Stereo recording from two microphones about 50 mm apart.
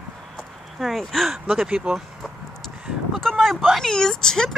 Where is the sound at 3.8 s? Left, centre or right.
Centre.